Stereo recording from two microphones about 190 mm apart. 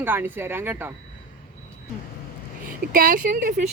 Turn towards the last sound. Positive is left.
turn(degrees=-45)  # may be behind; listen again after turning